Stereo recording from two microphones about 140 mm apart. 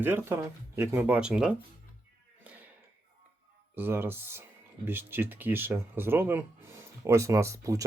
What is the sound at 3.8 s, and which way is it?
Speech, 15° right (ahead or behind).